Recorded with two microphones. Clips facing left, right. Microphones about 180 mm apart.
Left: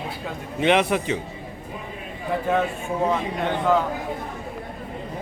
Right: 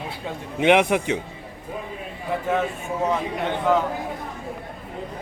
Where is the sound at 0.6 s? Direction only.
15° right (ahead or behind).